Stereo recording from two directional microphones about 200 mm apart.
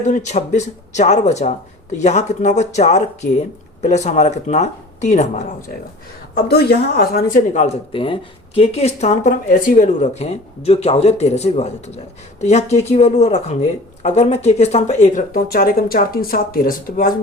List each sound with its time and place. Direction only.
0.0 s speech: 35° left (ahead or behind)
6.5 s speech: 55° left (ahead or behind)
7.5 s speech: 35° left (ahead or behind)